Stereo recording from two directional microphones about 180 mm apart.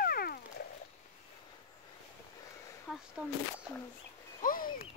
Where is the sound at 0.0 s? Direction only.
55° left (ahead or behind).